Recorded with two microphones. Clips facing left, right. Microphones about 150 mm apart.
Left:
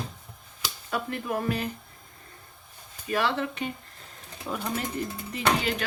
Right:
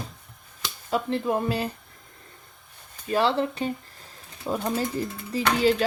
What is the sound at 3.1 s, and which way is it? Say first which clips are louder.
Speech: right 4 dB; 30° right (ahead or behind).